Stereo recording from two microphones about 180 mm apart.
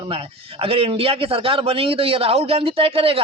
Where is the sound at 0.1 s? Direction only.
30° right (ahead or behind).